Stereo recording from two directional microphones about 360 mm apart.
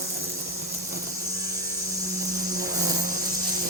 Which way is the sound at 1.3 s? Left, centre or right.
Centre.